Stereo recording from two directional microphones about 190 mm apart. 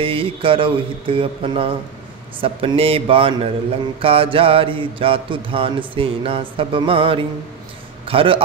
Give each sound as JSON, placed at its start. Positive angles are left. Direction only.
{"t": 0.0, "sound": "mantra", "side_deg": -30}
{"t": 8.0, "sound": "a man's voice", "side_deg": -30}